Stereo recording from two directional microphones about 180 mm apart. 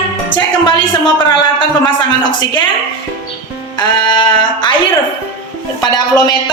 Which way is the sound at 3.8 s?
25° left (ahead or behind).